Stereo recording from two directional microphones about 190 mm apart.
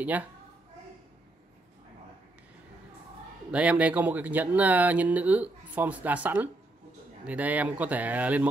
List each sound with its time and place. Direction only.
0.0 s speech: 10° right (ahead or behind)
3.5 s speech: 5° right (ahead or behind)